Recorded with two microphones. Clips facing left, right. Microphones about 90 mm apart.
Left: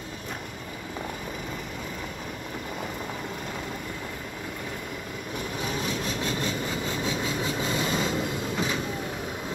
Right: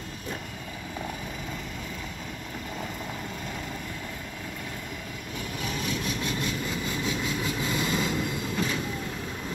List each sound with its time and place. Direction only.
5.6 s vehicle: 30° left (ahead or behind)